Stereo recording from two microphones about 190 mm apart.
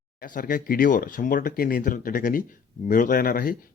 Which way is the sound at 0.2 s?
45° left (ahead or behind).